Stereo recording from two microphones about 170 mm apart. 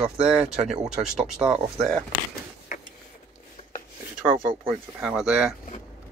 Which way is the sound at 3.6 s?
40° left (ahead or behind).